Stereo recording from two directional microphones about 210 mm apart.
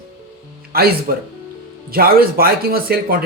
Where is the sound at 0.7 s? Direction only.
45° right (ahead or behind).